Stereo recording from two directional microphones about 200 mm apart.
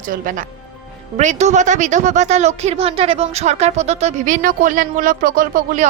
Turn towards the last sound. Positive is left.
turn(degrees=-40)  # may be behind; listen again after turning